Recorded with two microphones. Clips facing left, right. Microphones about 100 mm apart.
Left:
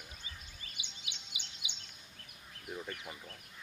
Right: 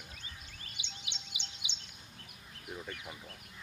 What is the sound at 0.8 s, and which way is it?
Bird vocalization, 25° right (ahead or behind).